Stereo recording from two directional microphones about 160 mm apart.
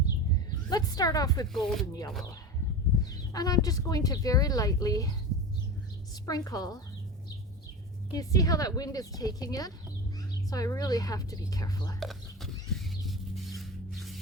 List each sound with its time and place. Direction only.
0.7 s speech: 25° left (ahead or behind)
1.5 s speech: 5° left (ahead or behind)
1.9 s speech: 25° left (ahead or behind)
6.2 s speech: 25° left (ahead or behind)
8.1 s speech: 20° left (ahead or behind)
11.9 s a sound: centre (ahead or behind)